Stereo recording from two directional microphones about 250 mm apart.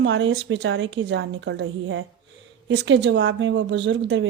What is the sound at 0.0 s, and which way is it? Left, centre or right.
A woman's voice, right.